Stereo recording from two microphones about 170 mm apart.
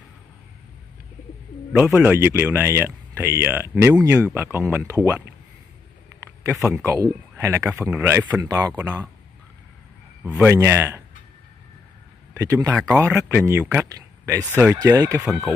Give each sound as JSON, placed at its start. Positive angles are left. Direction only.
{"t": 1.7, "sound": "speech", "side_deg": -5}
{"t": 6.5, "sound": "speech", "side_deg": -5}
{"t": 6.8, "sound": "speech", "side_deg": -15}
{"t": 10.2, "sound": "speech", "side_deg": -10}
{"t": 12.4, "sound": "speech", "side_deg": -20}
{"t": 15.2, "sound": "speech", "side_deg": 0}